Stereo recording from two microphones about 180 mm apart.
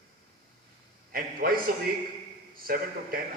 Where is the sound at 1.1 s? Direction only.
55° right (ahead or behind).